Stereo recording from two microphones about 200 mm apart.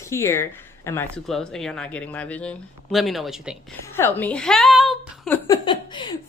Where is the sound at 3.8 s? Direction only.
10° left (ahead or behind).